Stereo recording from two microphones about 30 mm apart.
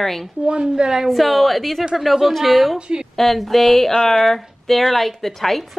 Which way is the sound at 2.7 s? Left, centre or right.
Right.